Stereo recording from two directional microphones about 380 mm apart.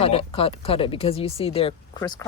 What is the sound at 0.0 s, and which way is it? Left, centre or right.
Speech, centre.